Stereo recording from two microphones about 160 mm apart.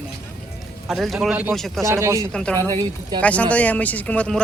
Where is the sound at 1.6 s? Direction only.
Centre (ahead or behind).